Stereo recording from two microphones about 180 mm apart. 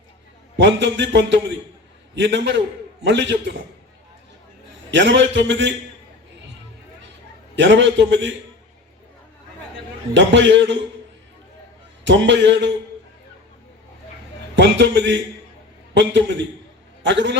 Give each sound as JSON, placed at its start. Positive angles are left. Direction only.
{"t": 0.5, "sound": "a man's voice", "side_deg": -80}
{"t": 4.9, "sound": "a man's voice", "side_deg": -80}
{"t": 7.5, "sound": "a man's voice", "side_deg": -80}
{"t": 10.2, "sound": "a man's voice", "side_deg": -80}
{"t": 12.0, "sound": "a man's voice", "side_deg": -90}
{"t": 14.5, "sound": "a man's voice", "side_deg": -80}